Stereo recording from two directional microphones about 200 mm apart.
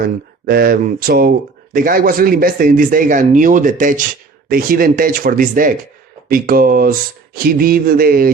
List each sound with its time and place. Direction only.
0.4 s speech: 45° right (ahead or behind)